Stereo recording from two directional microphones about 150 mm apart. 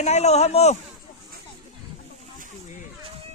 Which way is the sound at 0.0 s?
45° left (ahead or behind).